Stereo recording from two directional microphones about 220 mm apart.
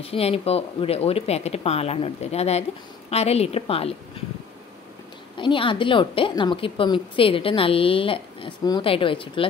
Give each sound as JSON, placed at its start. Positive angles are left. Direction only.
{"t": 0.0, "sound": "a woman's voice", "side_deg": 25}
{"t": 5.4, "sound": "a woman's voice", "side_deg": 20}